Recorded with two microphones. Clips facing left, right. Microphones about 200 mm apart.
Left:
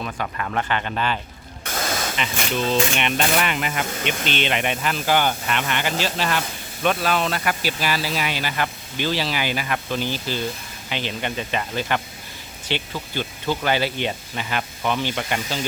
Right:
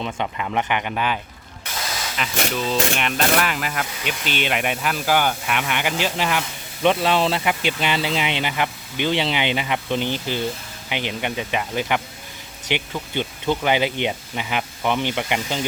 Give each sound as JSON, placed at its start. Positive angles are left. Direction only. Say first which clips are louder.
{"t": 0.0, "sound": "speech", "louder": "right 2 dB", "side_deg": -20}
{"t": 1.6, "sound": "spray", "louder": "left 4 dB", "side_deg": 50}
{"t": 2.1, "sound": "speech", "louder": "even", "side_deg": 0}
{"t": 6.8, "sound": "speech", "louder": "right 3 dB", "side_deg": -25}